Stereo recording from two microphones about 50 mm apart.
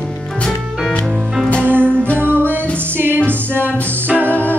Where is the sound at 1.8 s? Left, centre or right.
Left.